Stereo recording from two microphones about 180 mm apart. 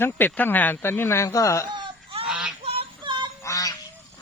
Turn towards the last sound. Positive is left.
turn(degrees=20)  # may be behind; listen again after turning